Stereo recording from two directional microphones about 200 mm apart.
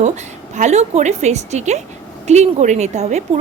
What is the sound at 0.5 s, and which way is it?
A woman's voice, 35° right (ahead or behind).